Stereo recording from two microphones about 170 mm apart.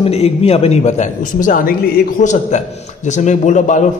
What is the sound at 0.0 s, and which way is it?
A man's voice, 35° left (ahead or behind).